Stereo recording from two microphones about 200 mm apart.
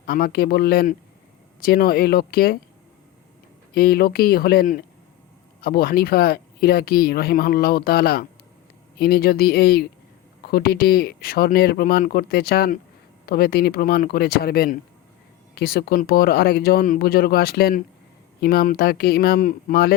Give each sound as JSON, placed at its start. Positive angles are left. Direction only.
{"t": 0.0, "sound": "speech", "side_deg": 45}
{"t": 3.8, "sound": "speech", "side_deg": 50}